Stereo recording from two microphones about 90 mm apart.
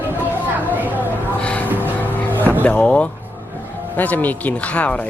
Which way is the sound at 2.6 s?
15° left (ahead or behind).